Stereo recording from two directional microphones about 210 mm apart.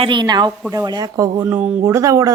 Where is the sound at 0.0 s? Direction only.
20° right (ahead or behind).